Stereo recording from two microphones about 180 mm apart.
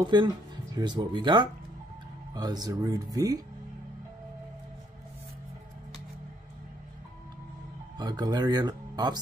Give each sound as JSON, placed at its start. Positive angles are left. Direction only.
{"t": 0.0, "sound": "speech", "side_deg": -25}
{"t": 8.0, "sound": "speech", "side_deg": -25}